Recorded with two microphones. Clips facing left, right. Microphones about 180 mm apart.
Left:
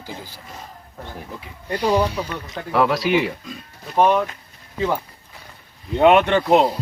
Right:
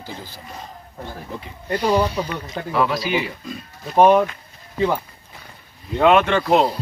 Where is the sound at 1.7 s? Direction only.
15° left (ahead or behind).